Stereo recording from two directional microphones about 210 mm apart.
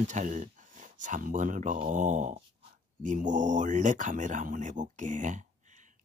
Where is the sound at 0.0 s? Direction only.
35° right (ahead or behind).